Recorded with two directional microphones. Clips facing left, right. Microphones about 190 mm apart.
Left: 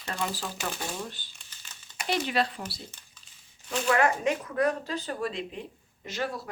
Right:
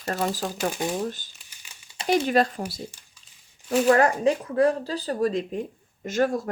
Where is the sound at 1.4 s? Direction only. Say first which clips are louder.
Even; 10° right (ahead or behind).